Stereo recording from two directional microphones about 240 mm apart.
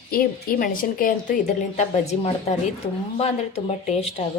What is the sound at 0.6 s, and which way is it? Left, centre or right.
A woman's voice, left.